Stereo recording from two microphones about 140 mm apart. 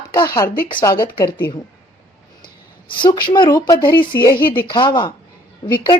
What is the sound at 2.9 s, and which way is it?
A woman's voice, 35° left (ahead or behind).